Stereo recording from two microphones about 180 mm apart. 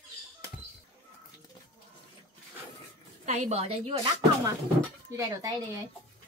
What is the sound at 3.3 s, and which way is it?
Speech, 40° right (ahead or behind).